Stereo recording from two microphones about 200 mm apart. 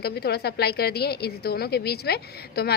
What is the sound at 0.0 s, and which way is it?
A woman's voice, 55° left (ahead or behind).